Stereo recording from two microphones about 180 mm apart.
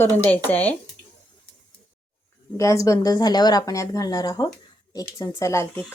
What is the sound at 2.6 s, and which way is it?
Speech, 15° left (ahead or behind).